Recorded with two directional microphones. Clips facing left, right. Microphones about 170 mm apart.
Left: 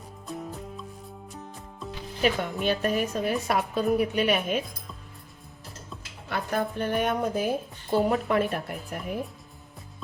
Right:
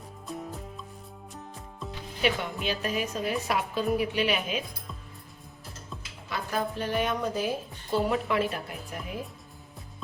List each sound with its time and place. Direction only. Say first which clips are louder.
0.3 s music: left 2 dB; centre (ahead or behind)
2.2 s speech: left 3 dB; 50° left (ahead or behind)
3.8 s a woman's voice: left 3 dB; centre (ahead or behind)
4.1 s speech: left 3 dB; 50° left (ahead or behind)
6.2 s speech: left 3 dB; 55° left (ahead or behind)